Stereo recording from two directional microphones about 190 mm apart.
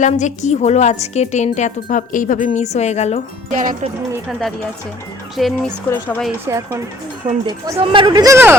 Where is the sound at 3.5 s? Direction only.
45° right (ahead or behind).